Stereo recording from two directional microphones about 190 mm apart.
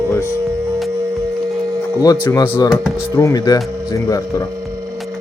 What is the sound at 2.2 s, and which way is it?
Speech, 10° left (ahead or behind).